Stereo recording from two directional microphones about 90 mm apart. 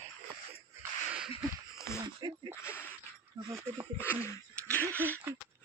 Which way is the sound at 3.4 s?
75° right (ahead or behind).